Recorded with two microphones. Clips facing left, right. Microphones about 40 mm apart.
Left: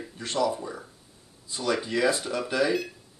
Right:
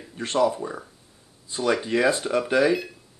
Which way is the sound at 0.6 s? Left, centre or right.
Right.